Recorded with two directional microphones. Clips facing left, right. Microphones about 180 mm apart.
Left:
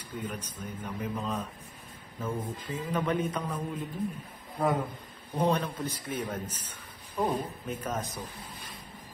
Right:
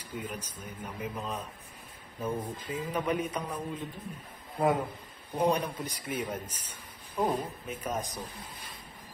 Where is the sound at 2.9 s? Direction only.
10° right (ahead or behind).